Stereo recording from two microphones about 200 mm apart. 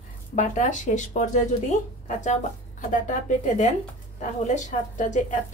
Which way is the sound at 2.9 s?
40° left (ahead or behind).